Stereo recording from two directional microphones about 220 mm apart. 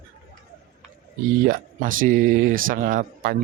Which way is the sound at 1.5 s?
40° right (ahead or behind).